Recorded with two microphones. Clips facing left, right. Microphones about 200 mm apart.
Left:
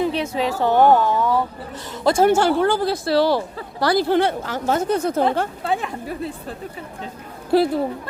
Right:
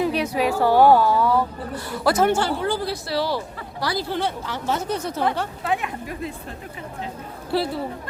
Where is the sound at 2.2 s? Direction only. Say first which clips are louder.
Left 5 dB; 45° left (ahead or behind).